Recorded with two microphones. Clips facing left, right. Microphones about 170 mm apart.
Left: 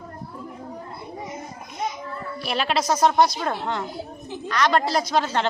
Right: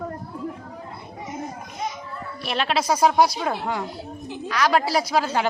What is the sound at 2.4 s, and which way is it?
A woman's voice, centre (ahead or behind).